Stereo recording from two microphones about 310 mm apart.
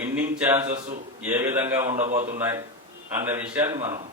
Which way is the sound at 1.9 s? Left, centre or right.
Right.